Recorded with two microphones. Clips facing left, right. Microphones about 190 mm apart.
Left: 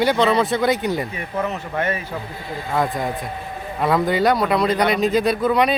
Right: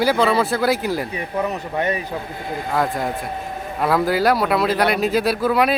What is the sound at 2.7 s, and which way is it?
Speech, centre (ahead or behind).